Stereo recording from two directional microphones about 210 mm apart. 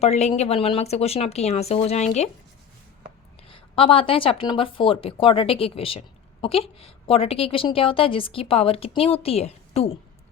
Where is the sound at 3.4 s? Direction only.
25° left (ahead or behind).